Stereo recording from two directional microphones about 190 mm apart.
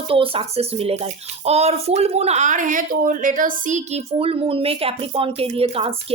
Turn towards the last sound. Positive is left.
turn(degrees=-30)  # may be behind; listen again after turning